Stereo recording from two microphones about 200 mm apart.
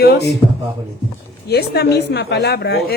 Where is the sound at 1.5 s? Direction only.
55° left (ahead or behind).